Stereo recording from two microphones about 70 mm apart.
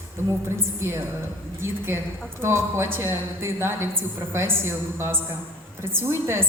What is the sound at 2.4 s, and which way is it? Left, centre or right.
A woman's voice, right.